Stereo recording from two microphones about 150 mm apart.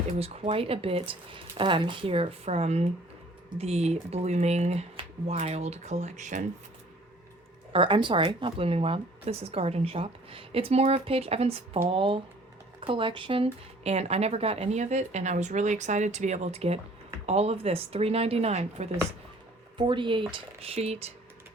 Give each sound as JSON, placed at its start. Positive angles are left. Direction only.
{"t": 0.2, "sound": "speech", "side_deg": -40}
{"t": 7.7, "sound": "speech", "side_deg": -35}
{"t": 19.7, "sound": "speech", "side_deg": -30}